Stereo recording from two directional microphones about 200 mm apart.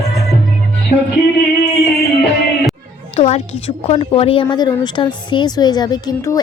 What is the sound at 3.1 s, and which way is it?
A woman's voice, 30° left (ahead or behind).